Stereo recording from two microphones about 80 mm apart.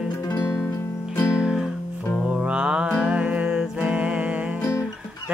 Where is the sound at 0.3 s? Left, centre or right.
Left.